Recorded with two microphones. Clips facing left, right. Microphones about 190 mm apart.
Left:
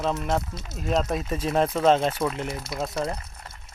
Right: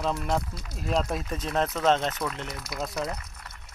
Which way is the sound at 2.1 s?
30° left (ahead or behind).